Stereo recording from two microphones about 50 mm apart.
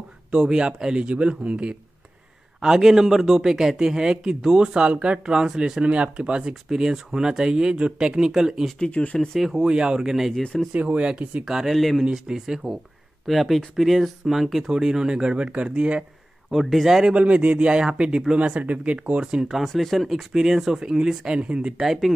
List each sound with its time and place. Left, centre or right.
0.3 s a man's voice: centre
2.6 s a man's voice: centre
8.7 s speech: left
9.4 s a man's voice: centre
9.7 s a man's voice: centre
10.7 s speech: right
11.4 s speech: centre
12.0 s a man's voice: centre
13.3 s speech: centre; by 16.0 s right
16.4 s speech: centre
17.1 s speech: right
19.6 s a man's voice: centre; by 21.7 s right
21.7 s a man's voice: centre